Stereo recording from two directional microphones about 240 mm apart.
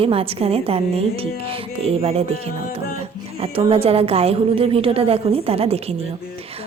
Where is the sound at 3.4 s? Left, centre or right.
Right.